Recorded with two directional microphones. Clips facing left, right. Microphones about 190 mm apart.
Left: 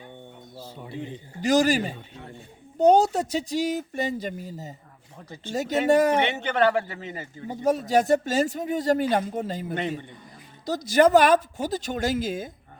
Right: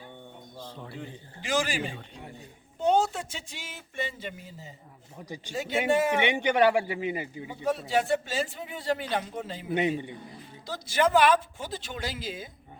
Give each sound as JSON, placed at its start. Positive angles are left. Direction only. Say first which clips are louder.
{"t": 0.9, "sound": "a man's voice", "louder": "left 10 dB", "side_deg": 20}
{"t": 1.4, "sound": "speech", "louder": "left 8 dB", "side_deg": 40}
{"t": 5.1, "sound": "a man's voice", "louder": "left 3 dB", "side_deg": -15}
{"t": 5.5, "sound": "speech", "louder": "left 5 dB", "side_deg": 40}
{"t": 6.1, "sound": "a man's voice", "louder": "even", "side_deg": -15}
{"t": 7.4, "sound": "speech", "louder": "left 7 dB", "side_deg": 40}